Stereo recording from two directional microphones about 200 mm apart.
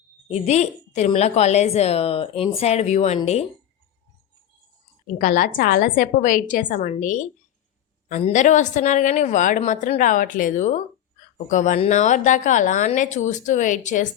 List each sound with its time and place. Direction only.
0.3 s a woman's voice: 35° left (ahead or behind)
5.0 s a woman's voice: 45° left (ahead or behind)